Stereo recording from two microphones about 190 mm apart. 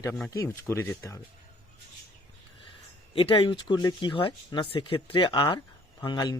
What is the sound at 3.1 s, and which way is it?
Speech, 25° left (ahead or behind).